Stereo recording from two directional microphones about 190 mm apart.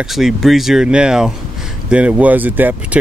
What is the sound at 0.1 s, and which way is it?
Speech, centre (ahead or behind).